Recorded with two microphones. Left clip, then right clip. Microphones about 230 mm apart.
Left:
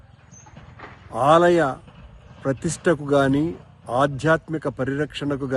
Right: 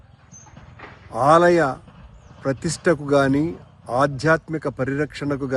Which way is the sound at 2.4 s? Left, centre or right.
Centre.